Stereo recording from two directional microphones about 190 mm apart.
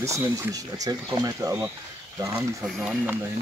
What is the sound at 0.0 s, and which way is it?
Speech, 15° right (ahead or behind).